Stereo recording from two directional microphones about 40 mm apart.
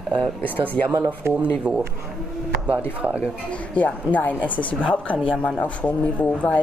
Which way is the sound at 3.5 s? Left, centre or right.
Left.